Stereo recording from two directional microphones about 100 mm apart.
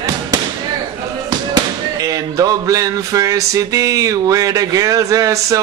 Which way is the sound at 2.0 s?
35° right (ahead or behind).